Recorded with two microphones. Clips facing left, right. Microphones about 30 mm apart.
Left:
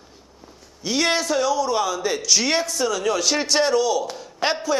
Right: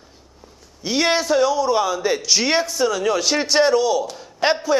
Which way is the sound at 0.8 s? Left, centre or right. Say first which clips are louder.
Right 2 dB; centre.